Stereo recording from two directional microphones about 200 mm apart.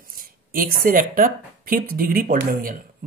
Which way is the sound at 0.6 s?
45° right (ahead or behind).